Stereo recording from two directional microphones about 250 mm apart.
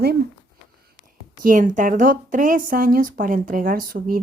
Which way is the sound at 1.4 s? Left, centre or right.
Right.